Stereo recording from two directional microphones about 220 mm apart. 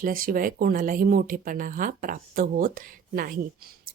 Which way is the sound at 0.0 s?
40° right (ahead or behind).